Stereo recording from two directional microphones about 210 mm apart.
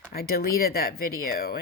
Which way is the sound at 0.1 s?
45° left (ahead or behind).